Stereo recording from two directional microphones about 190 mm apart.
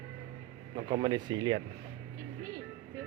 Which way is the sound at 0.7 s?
25° right (ahead or behind).